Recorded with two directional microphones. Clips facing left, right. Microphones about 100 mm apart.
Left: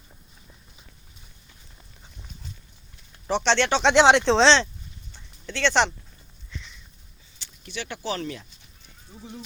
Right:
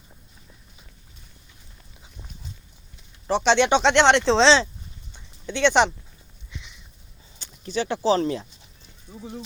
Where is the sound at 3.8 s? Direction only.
10° left (ahead or behind).